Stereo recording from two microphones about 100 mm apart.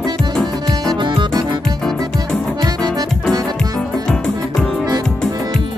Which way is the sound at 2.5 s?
45° right (ahead or behind).